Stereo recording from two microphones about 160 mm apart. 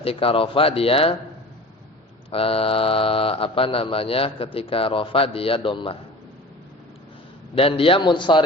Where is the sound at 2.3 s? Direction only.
35° left (ahead or behind).